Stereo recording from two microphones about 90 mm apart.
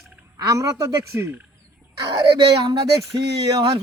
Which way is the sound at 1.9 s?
60° right (ahead or behind).